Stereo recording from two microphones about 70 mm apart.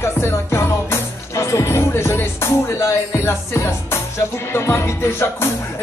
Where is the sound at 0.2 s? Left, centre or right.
Left.